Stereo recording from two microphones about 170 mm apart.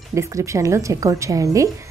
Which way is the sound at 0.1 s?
20° right (ahead or behind).